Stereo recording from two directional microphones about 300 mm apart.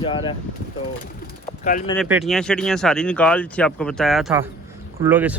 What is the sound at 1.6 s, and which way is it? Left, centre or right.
Speech, left.